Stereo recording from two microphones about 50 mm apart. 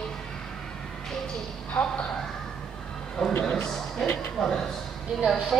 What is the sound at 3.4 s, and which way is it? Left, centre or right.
Speech, left.